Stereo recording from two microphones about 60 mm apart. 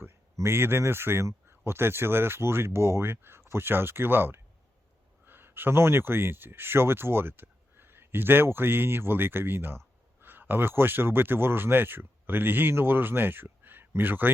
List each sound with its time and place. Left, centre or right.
0.3 s speech: right